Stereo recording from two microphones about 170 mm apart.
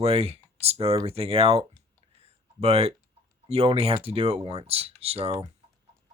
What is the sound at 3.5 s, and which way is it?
Speech, 35° right (ahead or behind).